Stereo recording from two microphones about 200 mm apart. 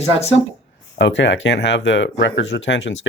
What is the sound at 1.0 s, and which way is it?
Speech, 65° left (ahead or behind).